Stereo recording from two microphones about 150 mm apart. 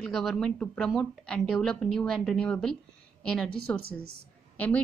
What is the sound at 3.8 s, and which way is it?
Speech, 90° right.